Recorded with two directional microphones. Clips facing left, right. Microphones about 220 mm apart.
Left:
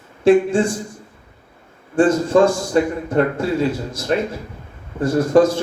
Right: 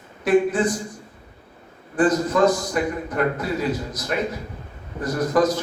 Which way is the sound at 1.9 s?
30° left (ahead or behind).